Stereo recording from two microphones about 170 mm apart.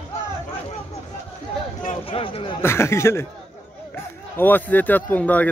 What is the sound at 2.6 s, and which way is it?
Speech, 15° left (ahead or behind).